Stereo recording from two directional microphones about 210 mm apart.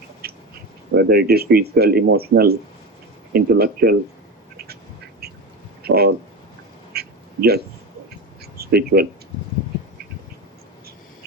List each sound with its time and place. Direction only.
0.2 s a sound: 50° right (ahead or behind)
0.9 s speech: 50° right (ahead or behind)
5.2 s duck: 50° right (ahead or behind)
5.8 s speech: 50° right (ahead or behind)
6.9 s quack: 50° right (ahead or behind)